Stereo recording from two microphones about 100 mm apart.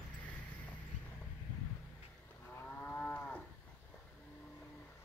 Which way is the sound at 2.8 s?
15° left (ahead or behind).